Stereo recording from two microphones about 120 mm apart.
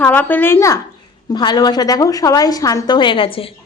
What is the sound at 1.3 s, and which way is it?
A woman's voice, 35° left (ahead or behind).